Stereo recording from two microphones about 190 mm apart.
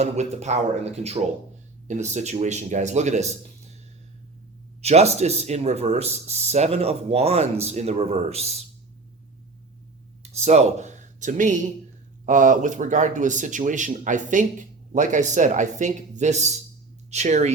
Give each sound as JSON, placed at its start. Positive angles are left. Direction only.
{"t": 0.0, "sound": "speech", "side_deg": -35}
{"t": 4.8, "sound": "speech", "side_deg": -35}
{"t": 10.3, "sound": "speech", "side_deg": -35}